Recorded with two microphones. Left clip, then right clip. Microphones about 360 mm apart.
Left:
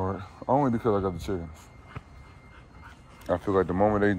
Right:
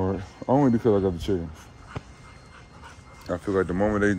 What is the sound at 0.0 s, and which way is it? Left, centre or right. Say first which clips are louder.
Speech: right 3 dB; centre.